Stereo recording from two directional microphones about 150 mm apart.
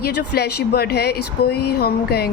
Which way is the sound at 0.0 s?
90° left.